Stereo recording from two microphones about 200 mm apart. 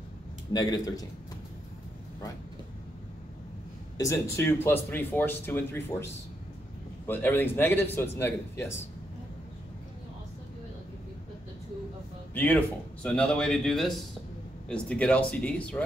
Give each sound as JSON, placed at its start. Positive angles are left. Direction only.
{"t": 0.5, "sound": "a man's voice", "side_deg": 20}
{"t": 4.0, "sound": "speech", "side_deg": 15}
{"t": 7.1, "sound": "speech", "side_deg": 10}
{"t": 12.4, "sound": "speech", "side_deg": 10}